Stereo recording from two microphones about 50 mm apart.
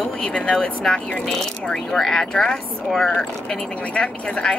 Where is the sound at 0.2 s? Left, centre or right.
Centre.